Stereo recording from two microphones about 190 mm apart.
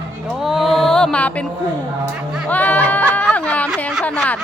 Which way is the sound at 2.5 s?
10° left (ahead or behind).